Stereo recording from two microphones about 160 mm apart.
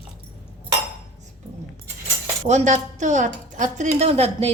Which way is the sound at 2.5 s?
50° right (ahead or behind).